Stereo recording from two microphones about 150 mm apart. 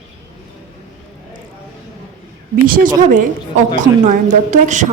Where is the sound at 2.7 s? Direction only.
65° right (ahead or behind).